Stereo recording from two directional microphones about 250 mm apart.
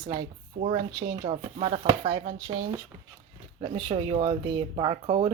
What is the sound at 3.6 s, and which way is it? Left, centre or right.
Speech, right.